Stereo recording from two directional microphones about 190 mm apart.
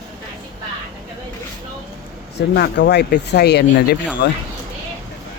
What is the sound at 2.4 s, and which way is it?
Speech, 65° left (ahead or behind).